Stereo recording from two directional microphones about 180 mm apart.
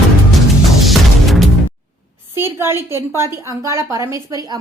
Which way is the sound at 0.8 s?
Centre (ahead or behind).